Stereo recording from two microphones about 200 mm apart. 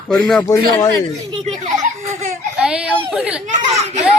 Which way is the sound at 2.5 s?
5° right (ahead or behind).